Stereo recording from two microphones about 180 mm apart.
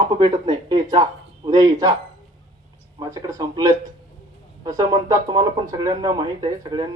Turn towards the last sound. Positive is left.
turn(degrees=-20)  # may be behind; listen again after turning